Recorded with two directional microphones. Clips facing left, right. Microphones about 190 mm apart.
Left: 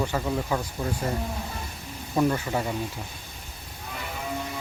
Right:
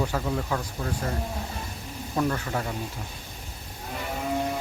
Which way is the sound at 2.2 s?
10° left (ahead or behind).